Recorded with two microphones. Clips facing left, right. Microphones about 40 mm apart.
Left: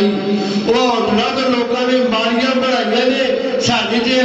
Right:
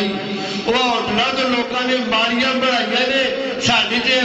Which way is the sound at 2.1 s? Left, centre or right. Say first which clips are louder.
Left 2 dB; right.